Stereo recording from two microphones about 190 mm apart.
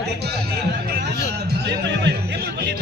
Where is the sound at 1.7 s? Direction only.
65° right (ahead or behind).